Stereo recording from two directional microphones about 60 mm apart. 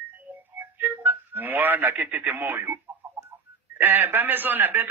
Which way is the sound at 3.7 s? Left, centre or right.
Right.